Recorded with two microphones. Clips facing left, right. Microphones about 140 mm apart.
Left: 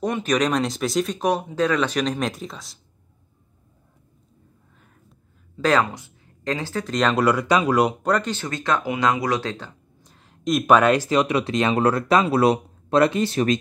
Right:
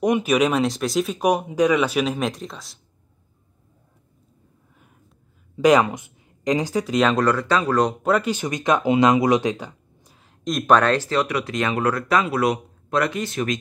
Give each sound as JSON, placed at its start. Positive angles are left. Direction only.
{"t": 0.0, "sound": "speech", "side_deg": -10}
{"t": 5.6, "sound": "speech", "side_deg": -15}
{"t": 7.2, "sound": "speech", "side_deg": 10}
{"t": 8.0, "sound": "speech", "side_deg": -5}
{"t": 10.0, "sound": "speech", "side_deg": 0}